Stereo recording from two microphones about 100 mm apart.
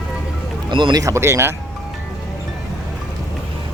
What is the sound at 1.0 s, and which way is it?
Speech, 30° right (ahead or behind).